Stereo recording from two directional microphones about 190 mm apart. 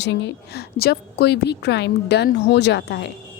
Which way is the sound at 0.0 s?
70° left (ahead or behind).